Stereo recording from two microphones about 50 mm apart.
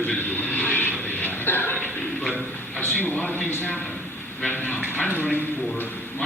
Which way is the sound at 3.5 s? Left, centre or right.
Left.